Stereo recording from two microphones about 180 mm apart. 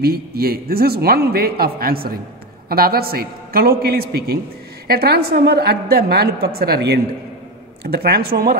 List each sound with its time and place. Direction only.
0.0 s a man's voice: 60° right (ahead or behind)